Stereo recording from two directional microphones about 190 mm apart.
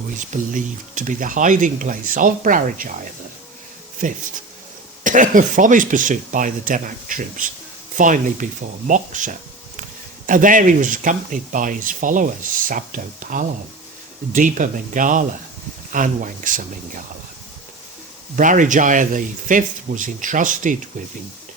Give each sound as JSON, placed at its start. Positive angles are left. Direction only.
{"t": 0.3, "sound": "speech", "side_deg": -40}
{"t": 18.3, "sound": "speech", "side_deg": -45}